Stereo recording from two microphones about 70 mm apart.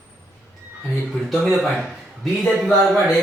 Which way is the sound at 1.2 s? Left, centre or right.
Centre.